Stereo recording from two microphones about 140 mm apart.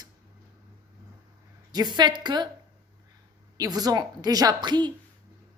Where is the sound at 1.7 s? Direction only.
30° right (ahead or behind).